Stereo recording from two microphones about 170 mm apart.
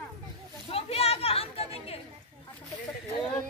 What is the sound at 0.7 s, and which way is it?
Chatter, 35° left (ahead or behind).